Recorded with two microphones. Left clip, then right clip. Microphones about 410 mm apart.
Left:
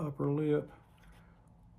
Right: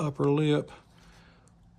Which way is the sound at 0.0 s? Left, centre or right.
Right.